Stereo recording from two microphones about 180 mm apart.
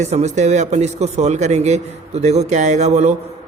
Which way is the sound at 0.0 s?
40° right (ahead or behind).